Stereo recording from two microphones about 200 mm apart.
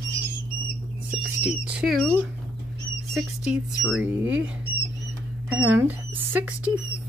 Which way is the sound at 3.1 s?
5° right (ahead or behind).